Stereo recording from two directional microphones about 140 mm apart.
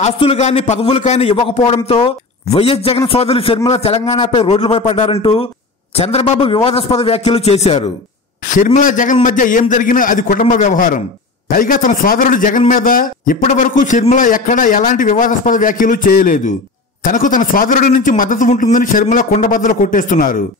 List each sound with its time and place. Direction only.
0.0 s a man's voice: 45° left (ahead or behind)
8.5 s a man's voice: 65° left (ahead or behind)
11.4 s a man's voice: 80° left
17.0 s a man's voice: 70° left (ahead or behind)